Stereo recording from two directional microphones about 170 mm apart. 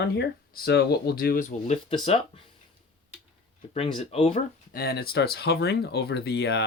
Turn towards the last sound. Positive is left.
turn(degrees=75)  # may be behind; listen again after turning